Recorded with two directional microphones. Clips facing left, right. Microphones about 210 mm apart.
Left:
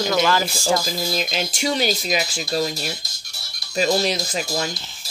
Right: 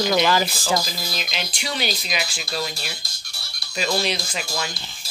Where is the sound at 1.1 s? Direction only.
45° left (ahead or behind).